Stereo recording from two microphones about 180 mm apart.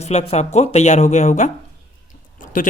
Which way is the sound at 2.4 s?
45° left (ahead or behind).